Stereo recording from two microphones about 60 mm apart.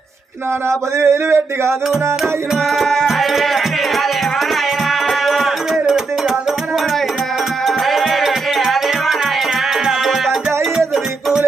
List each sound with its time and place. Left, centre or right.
0.7 s a sound: right
2.7 s music: centre
7.9 s music: centre
10.8 s music: centre